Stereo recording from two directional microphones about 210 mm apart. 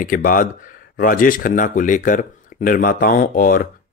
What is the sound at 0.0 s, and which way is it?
Speech, 40° left (ahead or behind).